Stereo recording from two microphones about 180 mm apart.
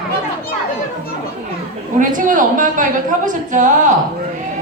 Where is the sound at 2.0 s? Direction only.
45° right (ahead or behind).